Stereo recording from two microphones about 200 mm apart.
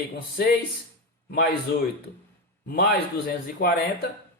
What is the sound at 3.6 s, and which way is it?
Speech, 50° left (ahead or behind).